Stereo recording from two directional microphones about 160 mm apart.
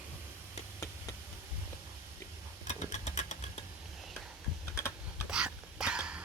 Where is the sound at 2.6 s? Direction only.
45° left (ahead or behind).